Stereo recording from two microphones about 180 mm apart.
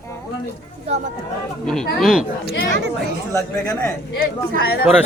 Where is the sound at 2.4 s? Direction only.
70° right (ahead or behind).